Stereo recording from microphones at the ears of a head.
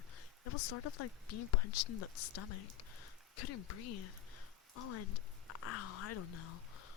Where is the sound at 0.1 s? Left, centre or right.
Left.